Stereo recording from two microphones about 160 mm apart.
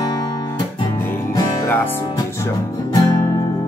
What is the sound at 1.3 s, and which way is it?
Music, 20° left (ahead or behind).